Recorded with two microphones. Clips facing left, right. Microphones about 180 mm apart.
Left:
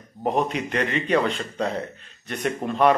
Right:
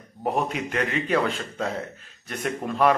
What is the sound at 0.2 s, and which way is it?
A man's voice, 5° right (ahead or behind).